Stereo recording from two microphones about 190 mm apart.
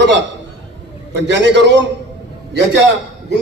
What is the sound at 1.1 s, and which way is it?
A man's voice, 65° right (ahead or behind).